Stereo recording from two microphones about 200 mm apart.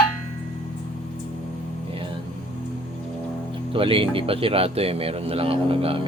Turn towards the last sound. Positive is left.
turn(degrees=-30)  # may be behind; listen again after turning